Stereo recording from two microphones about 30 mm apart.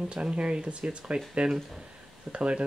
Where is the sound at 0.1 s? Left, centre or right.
Right.